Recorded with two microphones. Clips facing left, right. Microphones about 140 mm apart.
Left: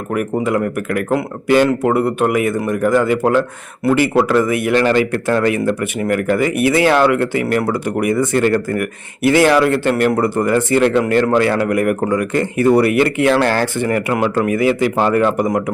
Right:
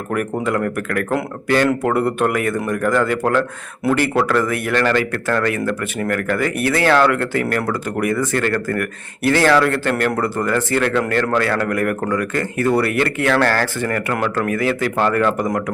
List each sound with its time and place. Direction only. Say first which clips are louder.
0.1 s speech: left 3 dB; 5° left (ahead or behind)